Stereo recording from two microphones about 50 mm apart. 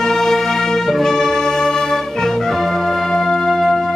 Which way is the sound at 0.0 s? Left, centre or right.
Centre.